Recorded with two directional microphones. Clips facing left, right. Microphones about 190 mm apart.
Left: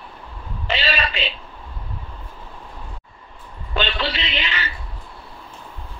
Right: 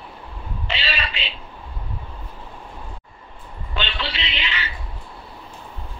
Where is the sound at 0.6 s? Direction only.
45° left (ahead or behind).